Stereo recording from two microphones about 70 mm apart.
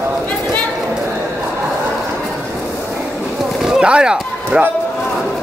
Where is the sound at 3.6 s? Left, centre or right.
Centre.